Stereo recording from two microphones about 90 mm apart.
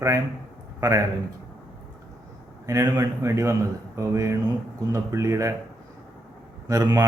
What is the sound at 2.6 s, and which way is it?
Speech, 40° right (ahead or behind).